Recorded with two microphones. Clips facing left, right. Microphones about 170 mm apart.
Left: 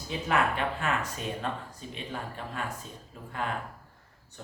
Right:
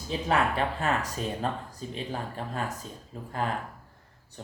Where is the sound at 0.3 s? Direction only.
35° right (ahead or behind).